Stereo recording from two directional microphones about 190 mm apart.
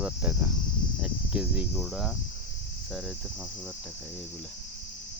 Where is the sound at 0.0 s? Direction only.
5° right (ahead or behind).